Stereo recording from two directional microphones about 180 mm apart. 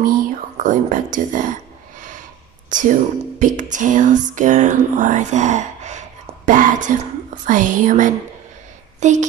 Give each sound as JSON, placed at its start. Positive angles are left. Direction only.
{"t": 0.7, "sound": "speech", "side_deg": -45}
{"t": 2.7, "sound": "a sound", "side_deg": -45}
{"t": 7.4, "sound": "a child's voice", "side_deg": -45}